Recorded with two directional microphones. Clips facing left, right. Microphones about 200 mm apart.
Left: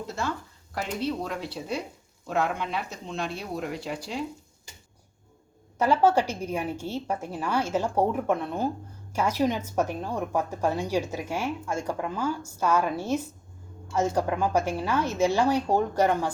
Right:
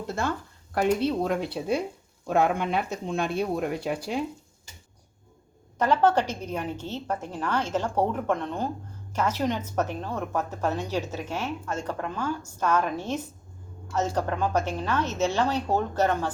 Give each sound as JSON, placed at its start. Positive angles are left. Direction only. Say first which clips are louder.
{"t": 0.1, "sound": "speech", "louder": "right 5 dB", "side_deg": -55}
{"t": 5.8, "sound": "a woman's voice", "louder": "even", "side_deg": 10}